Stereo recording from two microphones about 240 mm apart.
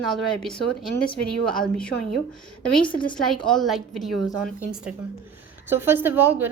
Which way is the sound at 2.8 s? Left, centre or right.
Left.